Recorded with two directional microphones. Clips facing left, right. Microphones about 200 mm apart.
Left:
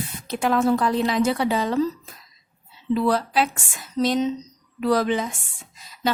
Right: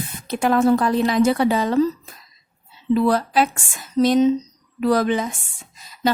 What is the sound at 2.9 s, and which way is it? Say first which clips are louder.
A woman's voice: right 3 dB; 45° right (ahead or behind).